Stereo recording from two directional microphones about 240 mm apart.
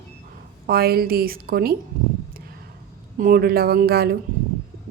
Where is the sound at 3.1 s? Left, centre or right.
Right.